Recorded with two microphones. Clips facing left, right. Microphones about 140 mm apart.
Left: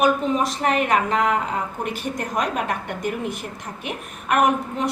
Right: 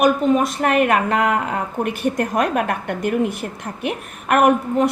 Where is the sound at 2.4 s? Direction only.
55° right (ahead or behind).